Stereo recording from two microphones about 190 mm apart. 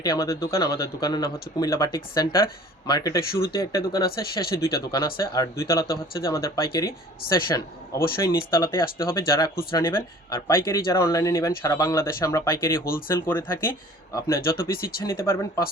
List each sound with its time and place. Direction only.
0.0 s speech: 20° left (ahead or behind)
4.2 s speech: 55° left (ahead or behind)
4.6 s speech: 20° left (ahead or behind)
14.7 s speech: 50° left (ahead or behind)
15.0 s speech: 15° left (ahead or behind)